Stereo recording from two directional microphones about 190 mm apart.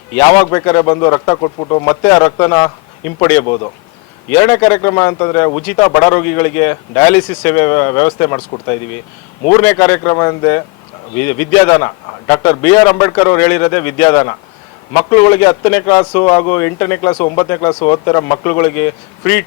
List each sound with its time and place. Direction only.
0.2 s a man's voice: 20° left (ahead or behind)
3.4 s speech: 25° left (ahead or behind)
4.4 s a man's voice: 15° left (ahead or behind)